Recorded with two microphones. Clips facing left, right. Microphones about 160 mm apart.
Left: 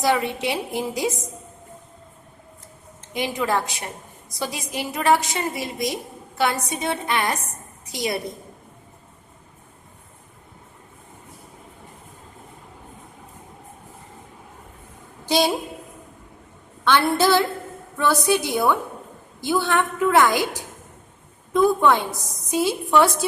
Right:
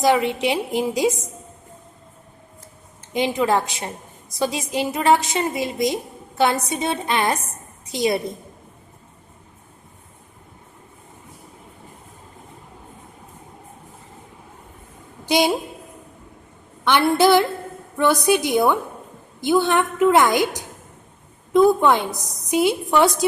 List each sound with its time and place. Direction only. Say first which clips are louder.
0.0 s a woman's voice: right 4 dB; 20° right (ahead or behind)
3.1 s a woman's voice: right 4 dB; 20° right (ahead or behind)
15.3 s a woman's voice: right 2 dB; 15° right (ahead or behind)
16.8 s a woman's voice: right 3 dB; 15° right (ahead or behind)